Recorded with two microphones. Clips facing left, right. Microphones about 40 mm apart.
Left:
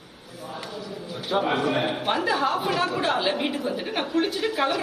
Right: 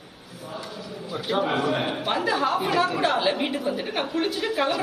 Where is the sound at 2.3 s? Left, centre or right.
Right.